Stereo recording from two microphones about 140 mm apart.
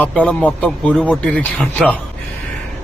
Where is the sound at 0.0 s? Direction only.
10° left (ahead or behind).